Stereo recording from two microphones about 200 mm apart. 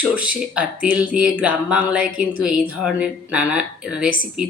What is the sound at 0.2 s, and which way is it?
A woman's voice, 5° right (ahead or behind).